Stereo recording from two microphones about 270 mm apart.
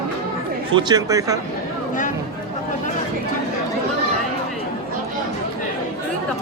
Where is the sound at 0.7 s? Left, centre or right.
Centre.